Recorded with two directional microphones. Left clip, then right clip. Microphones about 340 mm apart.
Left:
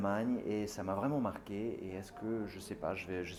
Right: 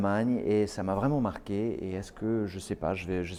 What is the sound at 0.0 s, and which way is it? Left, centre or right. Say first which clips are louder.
Speech: right 7 dB; right.